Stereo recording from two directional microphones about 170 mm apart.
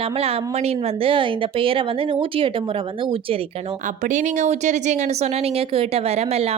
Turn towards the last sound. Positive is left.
turn(degrees=-35)  # may be behind; listen again after turning